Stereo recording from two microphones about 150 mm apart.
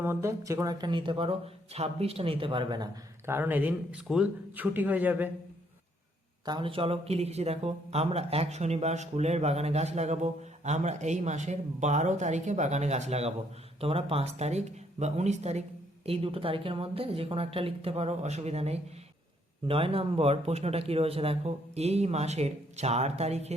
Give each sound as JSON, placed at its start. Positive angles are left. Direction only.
{"t": 0.0, "sound": "speech", "side_deg": -15}
{"t": 3.2, "sound": "speech", "side_deg": -15}
{"t": 6.4, "sound": "speech", "side_deg": -30}